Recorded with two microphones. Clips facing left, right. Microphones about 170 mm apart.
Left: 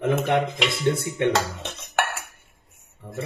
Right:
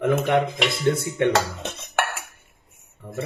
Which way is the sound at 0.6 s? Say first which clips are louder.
Right 1 dB; centre (ahead or behind).